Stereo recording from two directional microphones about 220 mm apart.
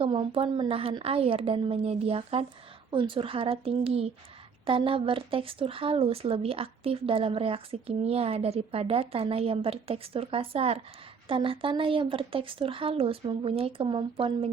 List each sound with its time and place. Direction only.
0.0 s a woman's voice: 25° right (ahead or behind)